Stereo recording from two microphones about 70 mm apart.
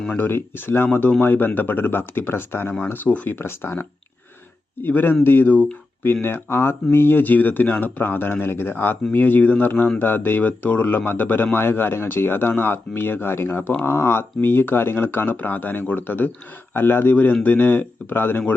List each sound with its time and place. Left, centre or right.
0.1 s speech: left
2.9 s speech: left